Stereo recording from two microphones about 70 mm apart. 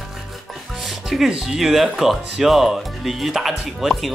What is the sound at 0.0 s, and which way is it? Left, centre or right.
Speech, centre.